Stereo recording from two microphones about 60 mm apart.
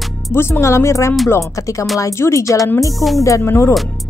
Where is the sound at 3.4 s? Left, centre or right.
Left.